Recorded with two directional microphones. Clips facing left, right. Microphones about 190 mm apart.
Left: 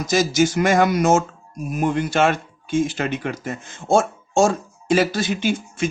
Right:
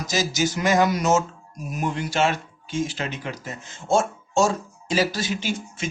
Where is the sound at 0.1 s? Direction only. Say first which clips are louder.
Left 6 dB; 55° left (ahead or behind).